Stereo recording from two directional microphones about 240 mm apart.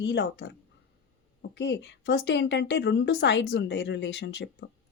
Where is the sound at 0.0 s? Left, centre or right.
Left.